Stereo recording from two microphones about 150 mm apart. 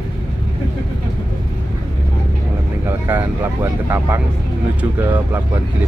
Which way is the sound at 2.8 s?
15° right (ahead or behind).